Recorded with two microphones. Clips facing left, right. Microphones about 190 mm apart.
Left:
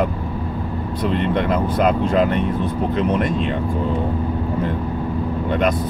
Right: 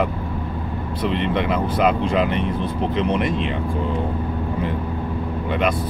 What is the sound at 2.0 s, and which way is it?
Speech, 45° left (ahead or behind).